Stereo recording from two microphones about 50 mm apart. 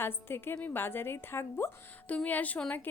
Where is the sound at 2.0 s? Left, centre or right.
Left.